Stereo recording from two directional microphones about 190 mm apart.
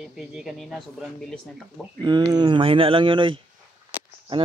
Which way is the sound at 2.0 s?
25° right (ahead or behind).